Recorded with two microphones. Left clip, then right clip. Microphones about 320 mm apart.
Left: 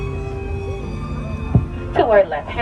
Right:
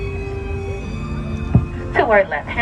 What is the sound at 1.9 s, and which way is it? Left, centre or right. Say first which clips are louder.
Music: left 1 dB; right.